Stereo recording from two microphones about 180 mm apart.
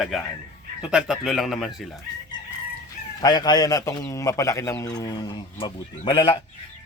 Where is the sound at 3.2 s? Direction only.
20° left (ahead or behind).